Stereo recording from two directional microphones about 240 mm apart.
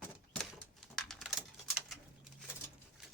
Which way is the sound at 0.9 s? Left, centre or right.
Centre.